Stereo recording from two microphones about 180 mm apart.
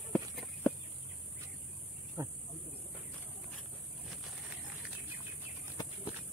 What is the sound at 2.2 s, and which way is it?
Speech, 15° right (ahead or behind).